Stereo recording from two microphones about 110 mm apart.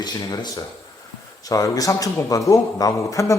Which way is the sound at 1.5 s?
30° left (ahead or behind).